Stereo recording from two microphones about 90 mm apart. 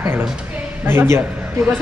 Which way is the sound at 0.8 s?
30° right (ahead or behind).